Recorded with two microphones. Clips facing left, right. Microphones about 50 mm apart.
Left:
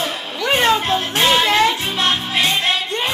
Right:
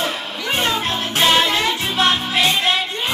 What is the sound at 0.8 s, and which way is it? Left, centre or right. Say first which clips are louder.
Music: left 1 dB; left.